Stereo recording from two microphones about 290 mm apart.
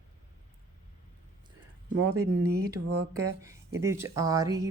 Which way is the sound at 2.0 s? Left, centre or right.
Right.